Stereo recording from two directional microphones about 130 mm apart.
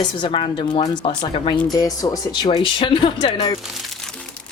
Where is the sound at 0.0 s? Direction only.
40° left (ahead or behind).